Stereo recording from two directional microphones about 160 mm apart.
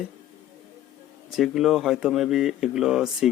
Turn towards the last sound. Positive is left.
turn(degrees=-5)  # may be behind; listen again after turning